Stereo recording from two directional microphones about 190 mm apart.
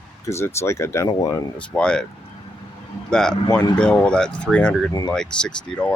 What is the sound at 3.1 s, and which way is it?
Speech, 5° left (ahead or behind).